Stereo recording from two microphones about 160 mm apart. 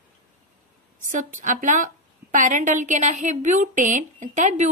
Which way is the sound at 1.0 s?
55° right (ahead or behind).